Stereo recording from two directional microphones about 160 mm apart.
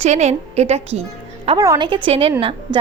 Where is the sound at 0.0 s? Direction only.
45° right (ahead or behind).